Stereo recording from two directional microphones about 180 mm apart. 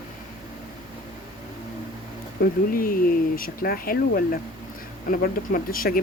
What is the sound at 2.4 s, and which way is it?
Speech, 50° left (ahead or behind).